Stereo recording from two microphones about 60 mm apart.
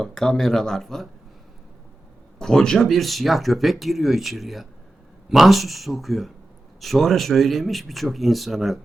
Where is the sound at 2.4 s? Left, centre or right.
Centre.